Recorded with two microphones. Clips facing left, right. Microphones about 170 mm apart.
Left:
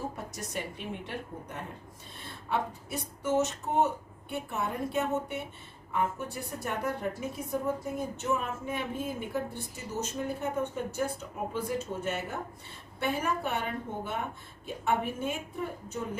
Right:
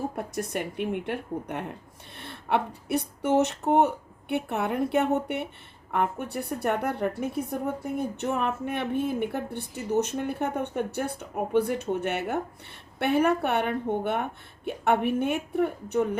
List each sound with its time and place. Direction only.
0.2 s a woman's voice: 60° right (ahead or behind)